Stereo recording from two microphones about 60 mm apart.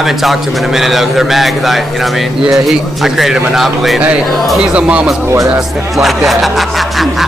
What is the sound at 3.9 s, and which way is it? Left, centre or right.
Speech, right.